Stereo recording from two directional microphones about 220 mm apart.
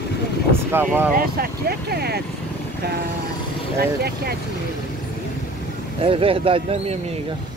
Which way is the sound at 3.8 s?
45° right (ahead or behind).